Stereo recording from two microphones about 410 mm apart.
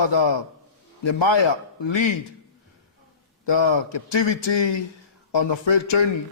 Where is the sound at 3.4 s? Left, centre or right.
Left.